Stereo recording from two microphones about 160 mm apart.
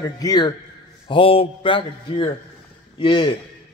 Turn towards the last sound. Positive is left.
turn(degrees=30)  # may be behind; listen again after turning